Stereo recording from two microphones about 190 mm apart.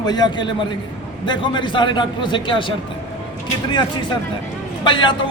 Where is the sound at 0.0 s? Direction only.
20° left (ahead or behind).